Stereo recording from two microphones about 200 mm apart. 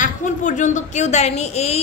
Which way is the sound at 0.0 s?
40° left (ahead or behind).